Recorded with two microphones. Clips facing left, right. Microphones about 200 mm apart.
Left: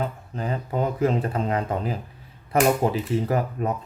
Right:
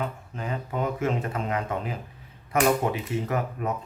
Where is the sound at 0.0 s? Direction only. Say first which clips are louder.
Left 3 dB; 35° left (ahead or behind).